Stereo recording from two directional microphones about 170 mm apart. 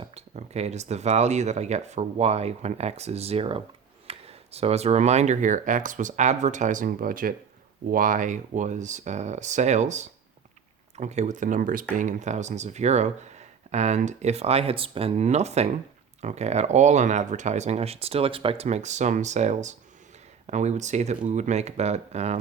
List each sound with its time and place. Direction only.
0.0 s speech: 40° right (ahead or behind)